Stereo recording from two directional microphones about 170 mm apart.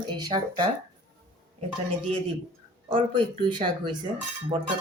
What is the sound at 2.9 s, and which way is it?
Speech, 30° right (ahead or behind).